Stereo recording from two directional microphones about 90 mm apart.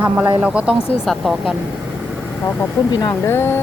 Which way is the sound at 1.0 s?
Centre (ahead or behind).